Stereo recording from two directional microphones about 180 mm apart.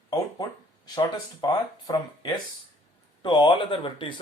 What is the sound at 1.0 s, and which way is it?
Speech, 20° left (ahead or behind).